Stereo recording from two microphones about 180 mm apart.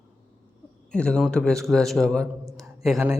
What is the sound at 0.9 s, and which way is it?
A man's voice, 5° left (ahead or behind).